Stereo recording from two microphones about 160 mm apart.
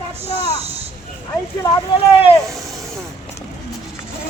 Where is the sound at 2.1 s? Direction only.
35° left (ahead or behind).